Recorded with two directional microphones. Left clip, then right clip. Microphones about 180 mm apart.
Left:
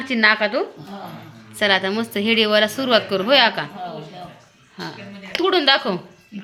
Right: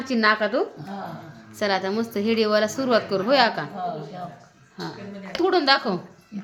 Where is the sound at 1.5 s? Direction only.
Centre (ahead or behind).